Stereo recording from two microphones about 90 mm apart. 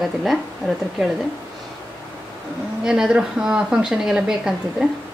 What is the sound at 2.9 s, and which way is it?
Speech, 10° right (ahead or behind).